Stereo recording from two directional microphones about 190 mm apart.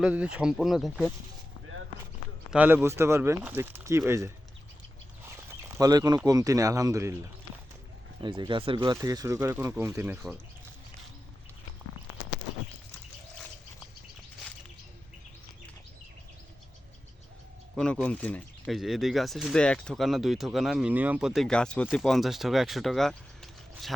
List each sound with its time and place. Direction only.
0.0 s speech: 5° right (ahead or behind)
2.5 s speech: 10° right (ahead or behind)
5.6 s speech: 15° right (ahead or behind)
8.2 s speech: 25° right (ahead or behind)
17.7 s speech: 5° left (ahead or behind)